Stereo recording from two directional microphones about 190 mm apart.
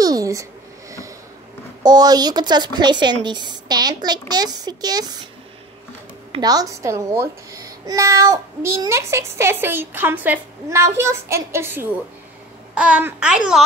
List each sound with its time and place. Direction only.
0.0 s a sound: 20° right (ahead or behind)
1.8 s a woman's voice: 20° right (ahead or behind)
6.3 s a child's voice: 20° right (ahead or behind)